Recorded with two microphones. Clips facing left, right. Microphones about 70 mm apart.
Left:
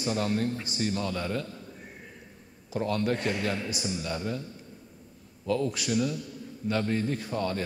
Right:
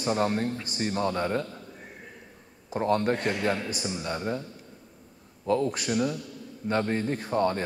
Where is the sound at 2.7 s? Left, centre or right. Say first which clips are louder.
Right 3 dB; right.